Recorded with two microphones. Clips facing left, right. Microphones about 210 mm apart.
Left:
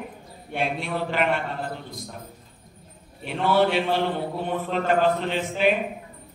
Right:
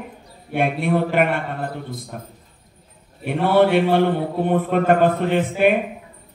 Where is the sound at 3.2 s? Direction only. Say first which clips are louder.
Right 5 dB; 55° right (ahead or behind).